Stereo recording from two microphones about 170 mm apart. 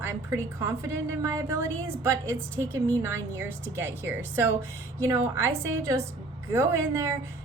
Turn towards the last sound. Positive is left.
turn(degrees=-15)  # may be behind; listen again after turning